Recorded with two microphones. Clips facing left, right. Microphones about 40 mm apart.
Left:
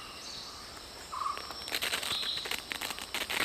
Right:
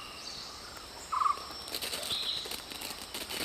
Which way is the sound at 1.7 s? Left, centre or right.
Left.